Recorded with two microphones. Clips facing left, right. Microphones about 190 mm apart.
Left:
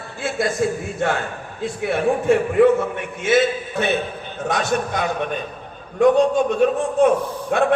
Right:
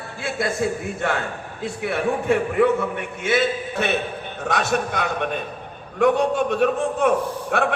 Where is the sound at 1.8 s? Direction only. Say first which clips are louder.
Left 3 dB; 60° right (ahead or behind).